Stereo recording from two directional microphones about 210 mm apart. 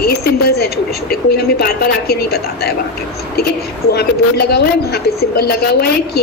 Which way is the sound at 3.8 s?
50° left (ahead or behind).